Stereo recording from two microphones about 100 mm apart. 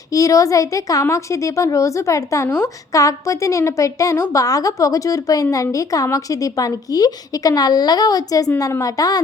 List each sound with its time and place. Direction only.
0.1 s a woman's voice: 35° left (ahead or behind)